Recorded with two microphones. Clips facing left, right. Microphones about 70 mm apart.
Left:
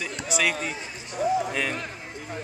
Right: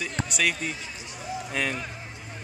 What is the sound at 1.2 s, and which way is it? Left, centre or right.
Speech, left.